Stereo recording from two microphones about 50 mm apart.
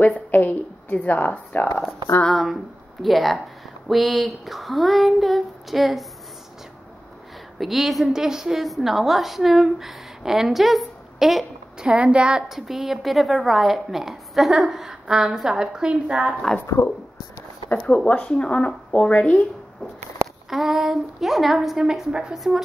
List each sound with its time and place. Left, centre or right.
0.0 s speech: left
2.3 s speech: centre
7.5 s a woman's voice: centre
11.8 s a woman's voice: right
12.4 s a woman's voice: centre
16.6 s speech: left
17.8 s speech: left
20.4 s a woman's voice: centre